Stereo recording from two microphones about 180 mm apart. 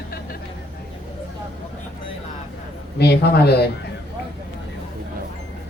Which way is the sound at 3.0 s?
65° left (ahead or behind).